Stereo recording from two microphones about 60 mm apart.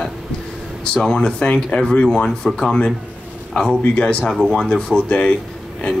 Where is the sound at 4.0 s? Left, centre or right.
Centre.